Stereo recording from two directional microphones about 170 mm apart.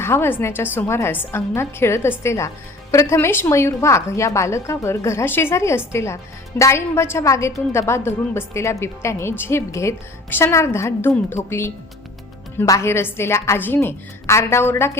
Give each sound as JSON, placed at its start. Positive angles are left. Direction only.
{"t": 0.0, "sound": "a woman's voice", "side_deg": 15}